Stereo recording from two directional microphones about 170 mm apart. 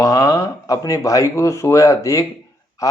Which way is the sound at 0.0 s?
20° left (ahead or behind).